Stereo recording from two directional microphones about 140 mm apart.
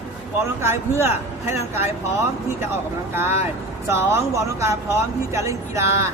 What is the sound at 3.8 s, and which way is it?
Speech, 20° right (ahead or behind).